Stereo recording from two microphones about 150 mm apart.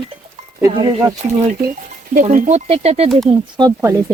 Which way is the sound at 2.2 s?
50° right (ahead or behind).